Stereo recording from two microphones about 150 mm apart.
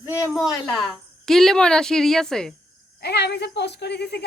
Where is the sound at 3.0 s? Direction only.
90° left.